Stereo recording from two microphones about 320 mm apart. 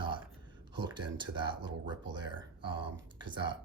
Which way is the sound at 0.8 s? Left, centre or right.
Centre.